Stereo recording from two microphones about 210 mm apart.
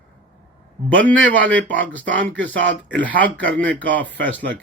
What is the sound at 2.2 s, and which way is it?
Speech, 60° right (ahead or behind).